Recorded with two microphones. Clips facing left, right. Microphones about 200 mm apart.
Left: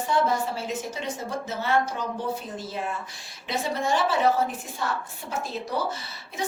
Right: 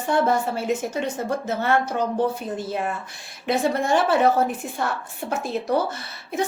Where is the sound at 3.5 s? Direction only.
55° right (ahead or behind).